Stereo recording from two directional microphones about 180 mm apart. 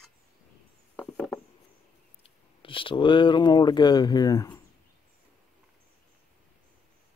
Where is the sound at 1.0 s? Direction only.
Centre (ahead or behind).